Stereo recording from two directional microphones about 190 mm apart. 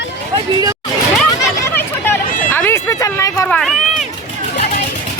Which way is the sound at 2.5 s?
10° left (ahead or behind).